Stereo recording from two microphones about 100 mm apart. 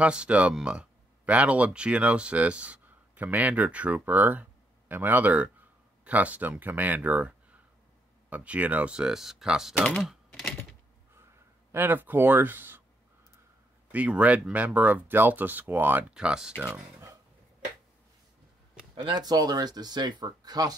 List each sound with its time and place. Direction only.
0.0 s speech: 10° right (ahead or behind)
10.0 s typing: centre (ahead or behind)
11.7 s speech: 20° right (ahead or behind)
13.9 s speech: 15° right (ahead or behind)
19.0 s speech: 45° right (ahead or behind)